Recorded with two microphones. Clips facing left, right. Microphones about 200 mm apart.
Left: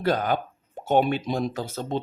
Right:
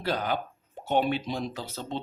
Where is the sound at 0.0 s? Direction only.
50° left (ahead or behind).